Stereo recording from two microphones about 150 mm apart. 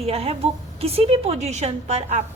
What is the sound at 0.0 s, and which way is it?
A woman's voice, 40° right (ahead or behind).